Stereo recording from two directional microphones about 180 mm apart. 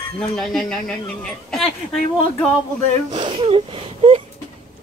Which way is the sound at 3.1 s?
30° right (ahead or behind).